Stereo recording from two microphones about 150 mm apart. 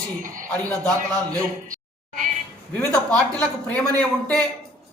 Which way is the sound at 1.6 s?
65° right (ahead or behind).